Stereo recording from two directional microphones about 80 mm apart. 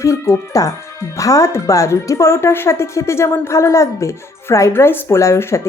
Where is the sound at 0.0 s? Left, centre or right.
Left.